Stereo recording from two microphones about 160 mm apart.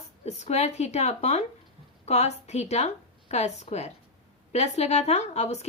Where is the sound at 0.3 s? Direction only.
45° left (ahead or behind).